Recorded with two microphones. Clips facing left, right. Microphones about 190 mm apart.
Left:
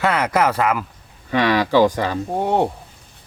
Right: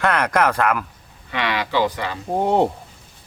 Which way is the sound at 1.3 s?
45° left (ahead or behind).